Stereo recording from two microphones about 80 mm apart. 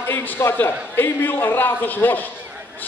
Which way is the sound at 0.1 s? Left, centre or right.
Left.